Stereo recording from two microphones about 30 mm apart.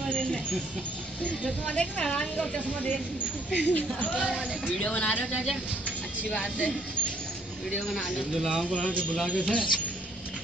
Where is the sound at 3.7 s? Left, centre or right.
Left.